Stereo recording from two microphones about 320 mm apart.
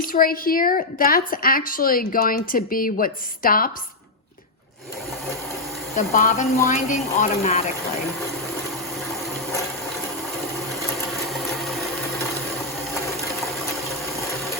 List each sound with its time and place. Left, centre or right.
0.0 s a woman's voice: left
6.0 s a woman's voice: left
11.6 s a sound: centre
12.9 s ratchet: centre